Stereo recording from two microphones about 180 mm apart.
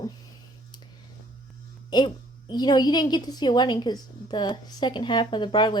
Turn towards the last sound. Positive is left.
turn(degrees=25)  # may be behind; listen again after turning